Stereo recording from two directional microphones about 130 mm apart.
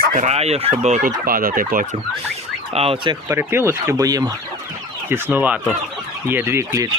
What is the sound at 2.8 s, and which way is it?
Speech, 50° right (ahead or behind).